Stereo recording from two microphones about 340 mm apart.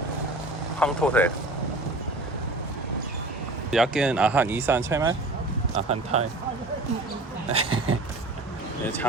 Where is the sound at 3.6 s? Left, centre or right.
Centre.